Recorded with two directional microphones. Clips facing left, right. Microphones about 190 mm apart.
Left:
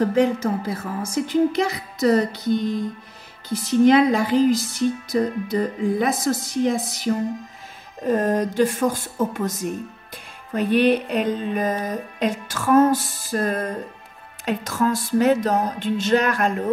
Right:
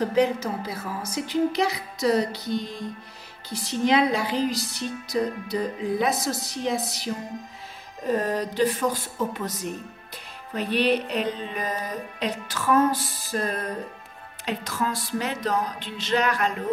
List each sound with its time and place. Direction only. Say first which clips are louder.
0.1 s a woman's voice: left 3 dB; 50° left (ahead or behind)